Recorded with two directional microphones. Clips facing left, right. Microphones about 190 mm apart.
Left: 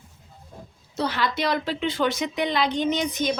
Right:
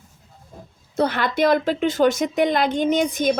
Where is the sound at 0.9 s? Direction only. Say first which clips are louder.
Right 5 dB; 55° right (ahead or behind).